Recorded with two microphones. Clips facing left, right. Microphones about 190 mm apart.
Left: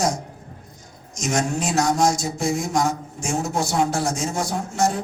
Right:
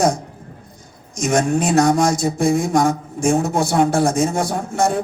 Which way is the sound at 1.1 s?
55° right (ahead or behind).